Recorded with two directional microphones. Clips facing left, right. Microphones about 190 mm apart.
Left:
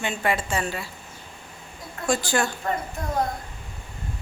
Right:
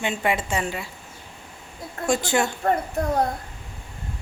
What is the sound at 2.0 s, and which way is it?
Speech, 25° right (ahead or behind).